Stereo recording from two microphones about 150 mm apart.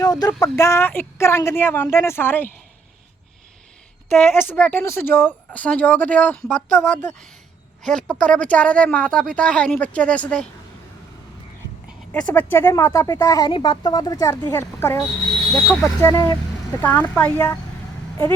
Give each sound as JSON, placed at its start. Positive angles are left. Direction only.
{"t": 0.0, "sound": "a sound", "side_deg": 25}
{"t": 0.4, "sound": "speech", "side_deg": 20}
{"t": 4.1, "sound": "speech", "side_deg": 10}
{"t": 12.2, "sound": "speech", "side_deg": 15}
{"t": 16.0, "sound": "speech", "side_deg": 25}
{"t": 16.8, "sound": "speech", "side_deg": 10}